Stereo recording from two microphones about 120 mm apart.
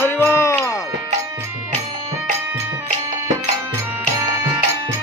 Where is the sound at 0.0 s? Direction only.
20° left (ahead or behind).